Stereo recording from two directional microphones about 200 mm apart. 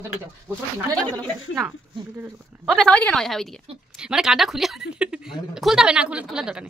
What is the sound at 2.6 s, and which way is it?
Speech, 5° left (ahead or behind).